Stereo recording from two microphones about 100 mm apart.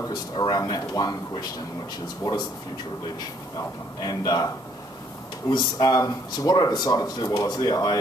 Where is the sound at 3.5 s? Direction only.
40° left (ahead or behind).